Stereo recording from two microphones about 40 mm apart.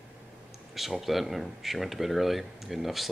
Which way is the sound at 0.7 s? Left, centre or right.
Centre.